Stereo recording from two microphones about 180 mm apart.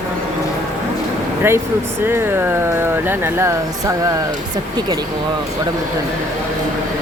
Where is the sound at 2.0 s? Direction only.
10° right (ahead or behind).